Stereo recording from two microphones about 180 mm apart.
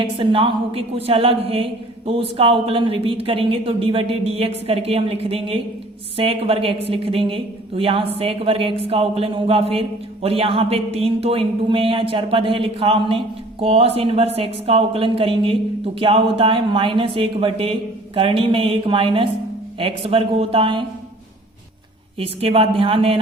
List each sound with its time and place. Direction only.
0.0 s speech: 25° right (ahead or behind)
22.2 s speech: 30° right (ahead or behind)